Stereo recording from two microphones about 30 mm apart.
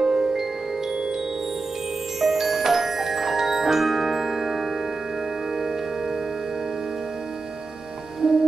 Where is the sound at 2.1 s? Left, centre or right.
Centre.